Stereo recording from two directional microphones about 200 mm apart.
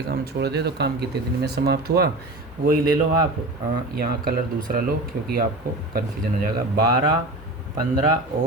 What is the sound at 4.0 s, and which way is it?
Speech, 45° right (ahead or behind).